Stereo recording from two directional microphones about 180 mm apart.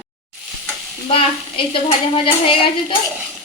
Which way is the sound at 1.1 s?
30° left (ahead or behind).